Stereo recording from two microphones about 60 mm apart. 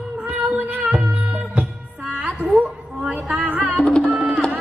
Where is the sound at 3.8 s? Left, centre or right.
Centre.